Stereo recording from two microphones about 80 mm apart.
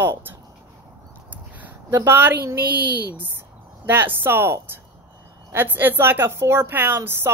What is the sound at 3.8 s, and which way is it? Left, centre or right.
A woman's voice, right.